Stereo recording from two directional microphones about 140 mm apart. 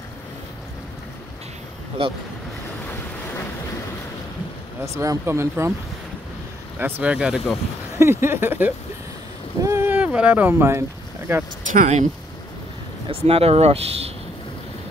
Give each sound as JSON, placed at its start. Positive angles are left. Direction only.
{"t": 2.0, "sound": "speech", "side_deg": -40}
{"t": 2.9, "sound": "vehicle", "side_deg": 20}
{"t": 4.8, "sound": "speech", "side_deg": -20}
{"t": 6.8, "sound": "speech", "side_deg": -10}
{"t": 8.0, "sound": "speech", "side_deg": -15}
{"t": 11.6, "sound": "speech", "side_deg": -60}
{"t": 13.1, "sound": "speech", "side_deg": -45}